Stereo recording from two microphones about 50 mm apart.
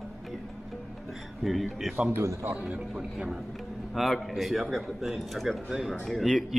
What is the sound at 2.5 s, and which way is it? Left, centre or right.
Speech, right.